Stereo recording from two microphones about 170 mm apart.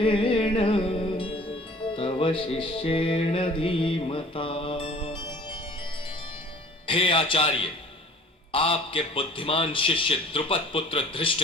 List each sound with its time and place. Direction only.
0.0 s music: 30° left (ahead or behind)
6.8 s a man's voice: 30° left (ahead or behind)